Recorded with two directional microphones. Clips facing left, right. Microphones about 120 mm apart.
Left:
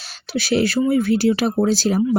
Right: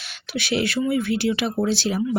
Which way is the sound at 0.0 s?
35° left (ahead or behind).